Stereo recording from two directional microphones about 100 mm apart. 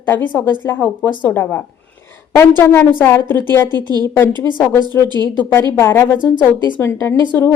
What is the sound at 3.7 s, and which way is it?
Speech, 40° right (ahead or behind).